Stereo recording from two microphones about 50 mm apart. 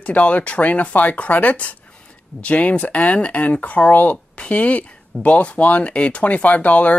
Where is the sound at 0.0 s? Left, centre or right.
Left.